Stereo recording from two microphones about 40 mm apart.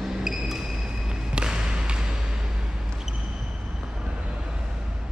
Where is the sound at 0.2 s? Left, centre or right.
Centre.